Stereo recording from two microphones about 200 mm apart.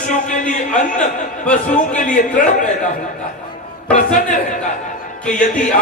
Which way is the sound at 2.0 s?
40° left (ahead or behind).